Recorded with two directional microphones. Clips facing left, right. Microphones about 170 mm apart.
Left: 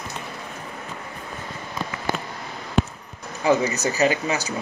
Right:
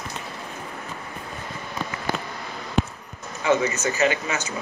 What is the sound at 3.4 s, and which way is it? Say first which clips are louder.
Speech: left 1 dB; 35° left (ahead or behind).